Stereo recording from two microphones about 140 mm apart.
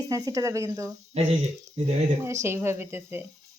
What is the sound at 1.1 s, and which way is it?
Speech, 45° right (ahead or behind).